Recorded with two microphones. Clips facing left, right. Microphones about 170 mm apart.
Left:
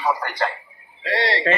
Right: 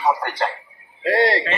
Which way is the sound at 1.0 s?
45° right (ahead or behind).